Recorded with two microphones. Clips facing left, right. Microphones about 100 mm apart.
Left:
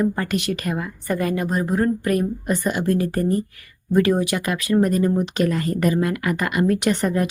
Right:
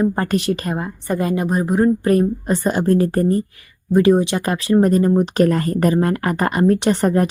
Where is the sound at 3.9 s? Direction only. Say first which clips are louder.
Right 4 dB; 25° right (ahead or behind); by 7.3 s 40° right (ahead or behind).